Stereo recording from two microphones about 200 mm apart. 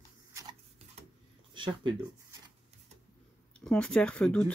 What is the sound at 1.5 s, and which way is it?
Speech, 25° right (ahead or behind).